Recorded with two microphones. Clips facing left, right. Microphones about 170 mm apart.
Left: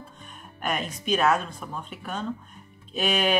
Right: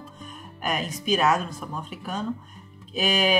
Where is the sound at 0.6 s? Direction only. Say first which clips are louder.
Right 1 dB; 5° right (ahead or behind).